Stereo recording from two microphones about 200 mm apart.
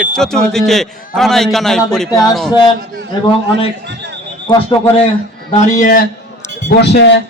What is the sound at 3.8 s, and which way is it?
Speech, 60° right (ahead or behind).